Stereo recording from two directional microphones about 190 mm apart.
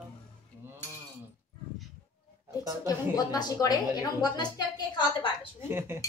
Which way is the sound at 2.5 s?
20° left (ahead or behind).